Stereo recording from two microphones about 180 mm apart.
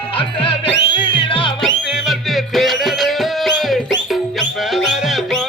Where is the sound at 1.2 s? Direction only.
30° left (ahead or behind).